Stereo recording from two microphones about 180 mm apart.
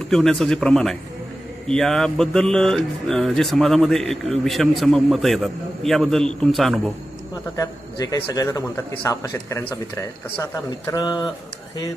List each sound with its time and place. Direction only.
0.1 s speech: 5° left (ahead or behind)
7.5 s a man's voice: 20° left (ahead or behind)